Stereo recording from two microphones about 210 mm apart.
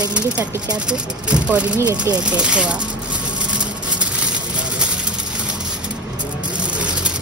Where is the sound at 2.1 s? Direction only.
5° right (ahead or behind).